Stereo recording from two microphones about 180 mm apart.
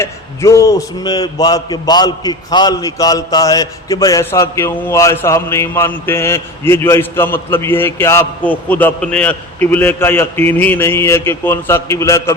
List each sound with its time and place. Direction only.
0.0 s a man's voice: 15° left (ahead or behind)